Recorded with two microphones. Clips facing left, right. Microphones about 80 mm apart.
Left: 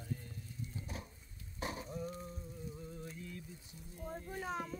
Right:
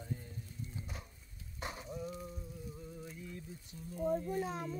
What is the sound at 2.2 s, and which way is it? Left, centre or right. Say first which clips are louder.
Raindrop: right 1 dB; centre.